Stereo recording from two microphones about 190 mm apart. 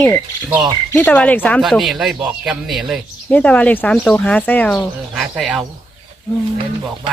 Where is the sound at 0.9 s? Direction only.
10° left (ahead or behind).